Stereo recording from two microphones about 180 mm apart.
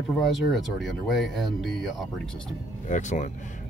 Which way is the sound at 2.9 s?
40° left (ahead or behind).